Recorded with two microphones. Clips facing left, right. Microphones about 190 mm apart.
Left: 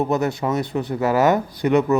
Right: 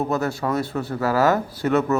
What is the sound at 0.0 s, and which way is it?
A man's voice, 20° left (ahead or behind).